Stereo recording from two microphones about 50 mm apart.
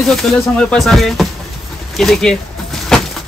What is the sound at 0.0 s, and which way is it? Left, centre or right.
Speech, centre.